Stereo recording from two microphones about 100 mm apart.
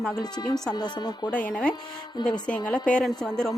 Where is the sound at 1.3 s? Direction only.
10° left (ahead or behind).